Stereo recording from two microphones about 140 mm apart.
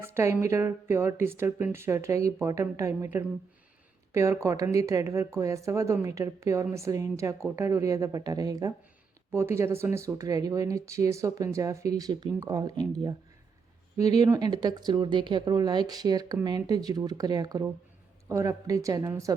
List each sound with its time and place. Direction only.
0.0 s speech: 20° right (ahead or behind)